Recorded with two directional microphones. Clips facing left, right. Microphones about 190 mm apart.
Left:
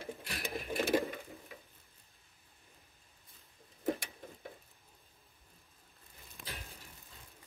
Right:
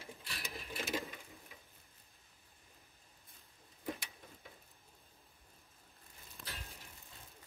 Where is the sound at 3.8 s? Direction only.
50° left (ahead or behind).